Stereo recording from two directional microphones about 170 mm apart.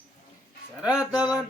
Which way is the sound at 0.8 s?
5° right (ahead or behind).